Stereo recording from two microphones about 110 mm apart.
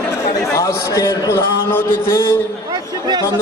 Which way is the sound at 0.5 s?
30° left (ahead or behind).